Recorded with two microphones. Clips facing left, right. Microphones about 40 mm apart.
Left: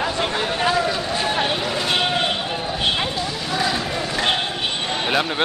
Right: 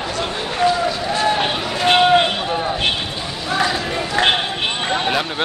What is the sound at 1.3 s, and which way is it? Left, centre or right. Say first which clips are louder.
Run: right 1 dB; right.